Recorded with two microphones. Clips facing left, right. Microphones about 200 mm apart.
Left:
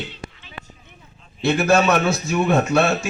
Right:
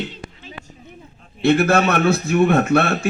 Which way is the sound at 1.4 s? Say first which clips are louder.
Right 2 dB; 55° right (ahead or behind).